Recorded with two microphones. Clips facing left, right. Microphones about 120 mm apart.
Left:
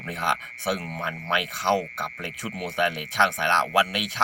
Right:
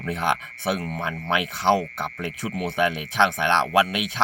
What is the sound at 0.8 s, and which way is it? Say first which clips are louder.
Speech: right 3 dB; centre (ahead or behind).